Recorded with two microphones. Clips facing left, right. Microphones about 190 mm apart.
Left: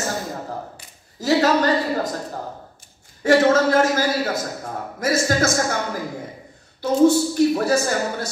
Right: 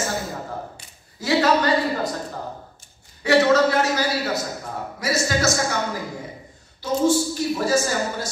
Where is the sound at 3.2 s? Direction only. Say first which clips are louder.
Left 1 dB; 45° left (ahead or behind).